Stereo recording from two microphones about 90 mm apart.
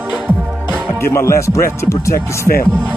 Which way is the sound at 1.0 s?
30° left (ahead or behind).